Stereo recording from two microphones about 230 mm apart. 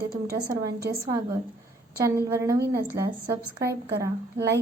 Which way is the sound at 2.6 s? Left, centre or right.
Right.